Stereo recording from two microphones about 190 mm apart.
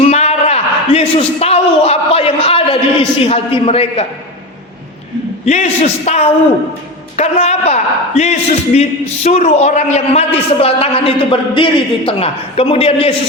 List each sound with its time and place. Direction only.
0.0 s a sound: 35° left (ahead or behind)
3.2 s a man's voice: 30° left (ahead or behind)
5.5 s a man's voice: 35° left (ahead or behind)